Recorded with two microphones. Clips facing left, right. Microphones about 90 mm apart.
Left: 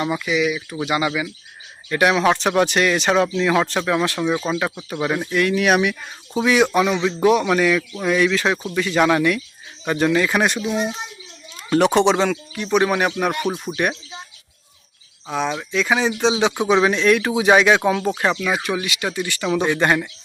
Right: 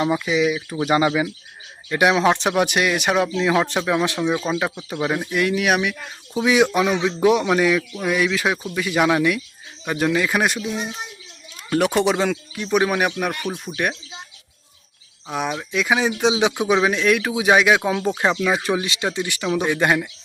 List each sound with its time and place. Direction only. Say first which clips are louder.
0.0 s speech: right 1 dB; 25° right (ahead or behind)
1.9 s speech: even; 20° right (ahead or behind)
4.9 s speech: left 1 dB; 5° right (ahead or behind)
5.6 s speech: left 3 dB; centre (ahead or behind)
6.4 s speech: left 1 dB; 15° right (ahead or behind)
11.9 s speech: left 3 dB; 5° right (ahead or behind)
13.4 s speech: left 4 dB; 20° left (ahead or behind)
15.3 s speech: left 2 dB; 10° right (ahead or behind)
18.2 s speech: even; 20° right (ahead or behind)
18.4 s speech: right 1 dB; 30° right (ahead or behind)
19.1 s speech: left 1 dB; 15° right (ahead or behind)
19.5 s speech: left 1 dB; 5° right (ahead or behind)